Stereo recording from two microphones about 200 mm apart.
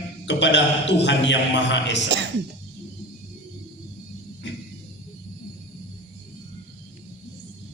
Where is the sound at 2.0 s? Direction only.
60° right (ahead or behind).